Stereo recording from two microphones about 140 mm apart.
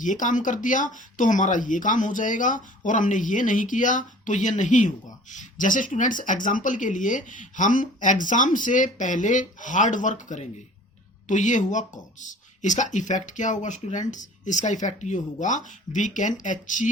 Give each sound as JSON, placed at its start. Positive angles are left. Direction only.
{"t": 0.0, "sound": "speech", "side_deg": 65}